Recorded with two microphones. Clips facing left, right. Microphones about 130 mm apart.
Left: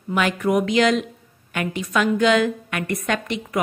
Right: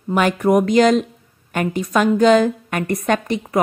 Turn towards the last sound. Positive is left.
turn(degrees=-40)  # may be behind; listen again after turning